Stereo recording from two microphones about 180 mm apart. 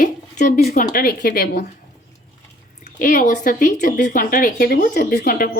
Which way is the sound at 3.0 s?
50° left (ahead or behind).